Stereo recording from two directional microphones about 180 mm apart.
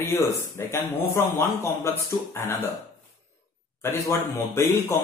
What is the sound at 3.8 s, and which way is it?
Speech, 15° left (ahead or behind).